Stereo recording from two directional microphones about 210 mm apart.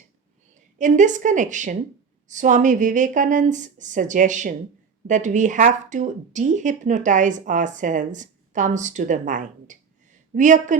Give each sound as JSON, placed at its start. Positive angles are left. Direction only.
{"t": 0.8, "sound": "speech", "side_deg": -35}